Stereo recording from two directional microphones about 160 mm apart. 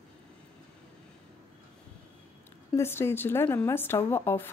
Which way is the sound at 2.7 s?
15° left (ahead or behind).